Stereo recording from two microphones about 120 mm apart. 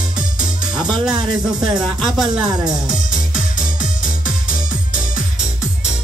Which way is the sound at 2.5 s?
35° right (ahead or behind).